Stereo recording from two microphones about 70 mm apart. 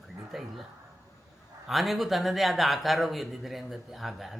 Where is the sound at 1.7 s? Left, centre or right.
Centre.